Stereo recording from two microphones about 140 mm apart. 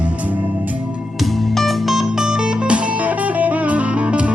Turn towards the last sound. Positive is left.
turn(degrees=-10)  # may be behind; listen again after turning